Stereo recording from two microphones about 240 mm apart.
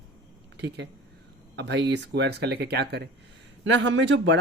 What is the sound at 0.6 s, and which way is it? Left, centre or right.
Speech, right.